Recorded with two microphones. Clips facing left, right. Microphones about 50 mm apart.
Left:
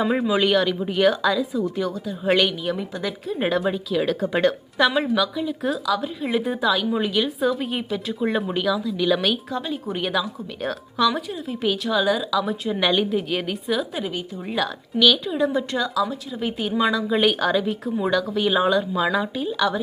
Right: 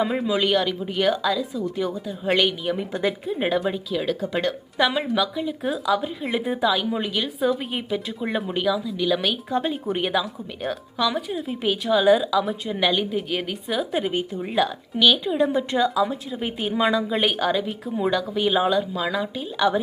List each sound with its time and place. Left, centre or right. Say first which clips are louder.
0.1 s a woman's voice: left 2 dB; centre
1.8 s a woman's voice: left 1 dB; centre
2.9 s speech: right 4 dB; right
3.3 s a woman's voice: left 1 dB; centre
9.5 s speech: right 4 dB; right
9.8 s speech: right 1 dB; centre
12.5 s a woman's voice: left 1 dB; centre
13.9 s speech: right 4 dB; right
14.4 s a woman's voice: right 1 dB; centre
19.5 s speech: right 3 dB; centre